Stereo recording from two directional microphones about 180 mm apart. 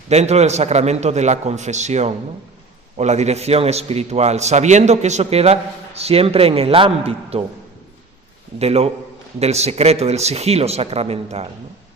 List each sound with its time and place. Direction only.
0.1 s a man's voice: 35° right (ahead or behind)
8.5 s a man's voice: 35° right (ahead or behind)